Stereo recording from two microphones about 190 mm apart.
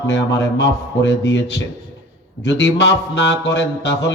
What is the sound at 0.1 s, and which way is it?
Speech, 70° left (ahead or behind).